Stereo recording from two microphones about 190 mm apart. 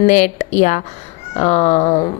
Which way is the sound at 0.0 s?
40° left (ahead or behind).